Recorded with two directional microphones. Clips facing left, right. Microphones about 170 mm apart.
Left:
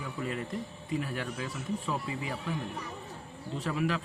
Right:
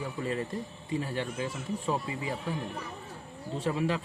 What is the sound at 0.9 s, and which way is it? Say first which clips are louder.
Speech: right 2 dB; 30° right (ahead or behind).